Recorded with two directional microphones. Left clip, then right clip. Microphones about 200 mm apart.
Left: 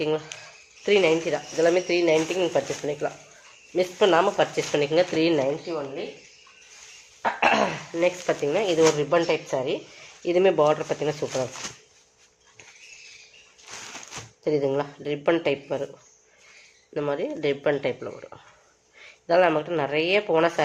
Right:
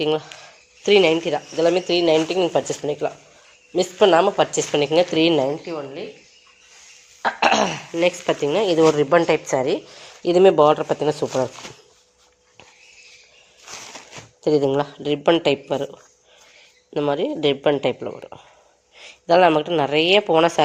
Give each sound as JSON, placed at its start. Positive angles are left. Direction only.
{"t": 0.0, "sound": "speech", "side_deg": -35}
{"t": 7.2, "sound": "speech", "side_deg": -50}
{"t": 14.4, "sound": "speech", "side_deg": -40}
{"t": 16.9, "sound": "speech", "side_deg": -40}
{"t": 18.9, "sound": "speech", "side_deg": -40}